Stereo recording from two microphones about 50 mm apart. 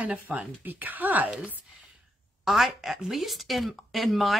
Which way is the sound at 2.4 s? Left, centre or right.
Centre.